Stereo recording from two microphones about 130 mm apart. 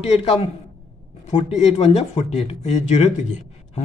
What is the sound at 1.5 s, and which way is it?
Speech, 55° left (ahead or behind).